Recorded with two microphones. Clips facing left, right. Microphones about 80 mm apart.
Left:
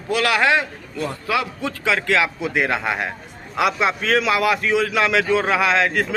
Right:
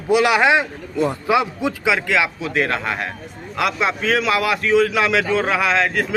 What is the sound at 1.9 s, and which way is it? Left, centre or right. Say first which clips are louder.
A man's voice: left 1 dB; centre.